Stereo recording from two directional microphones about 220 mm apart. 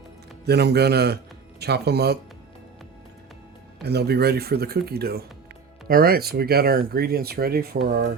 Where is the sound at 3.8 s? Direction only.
45° right (ahead or behind).